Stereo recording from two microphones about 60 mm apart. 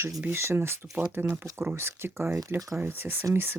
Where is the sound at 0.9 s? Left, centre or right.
Right.